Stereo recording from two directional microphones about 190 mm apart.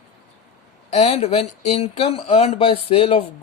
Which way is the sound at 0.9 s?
35° left (ahead or behind).